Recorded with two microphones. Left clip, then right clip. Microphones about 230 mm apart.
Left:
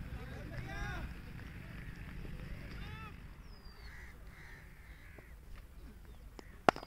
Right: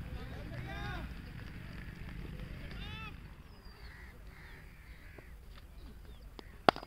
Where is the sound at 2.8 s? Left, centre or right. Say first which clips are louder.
Right 5 dB; right.